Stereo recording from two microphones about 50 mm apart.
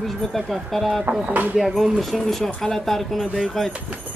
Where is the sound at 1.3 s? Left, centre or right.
Right.